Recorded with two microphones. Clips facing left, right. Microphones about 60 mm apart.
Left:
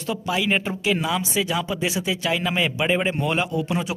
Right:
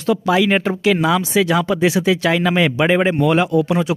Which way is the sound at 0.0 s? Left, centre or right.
Right.